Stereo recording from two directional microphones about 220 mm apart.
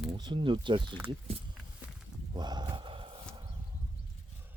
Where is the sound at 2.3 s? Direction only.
20° right (ahead or behind).